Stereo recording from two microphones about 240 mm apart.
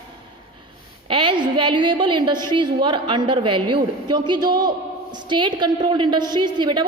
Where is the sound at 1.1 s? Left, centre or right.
Right.